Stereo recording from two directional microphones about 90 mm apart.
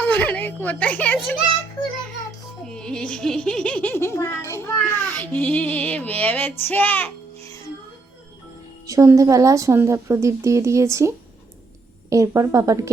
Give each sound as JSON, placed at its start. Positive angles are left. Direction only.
{"t": 0.0, "sound": "a child's voice", "side_deg": 20}
{"t": 2.6, "sound": "music", "side_deg": 10}
{"t": 3.9, "sound": "a child's voice", "side_deg": 25}
{"t": 8.9, "sound": "a woman's voice", "side_deg": -40}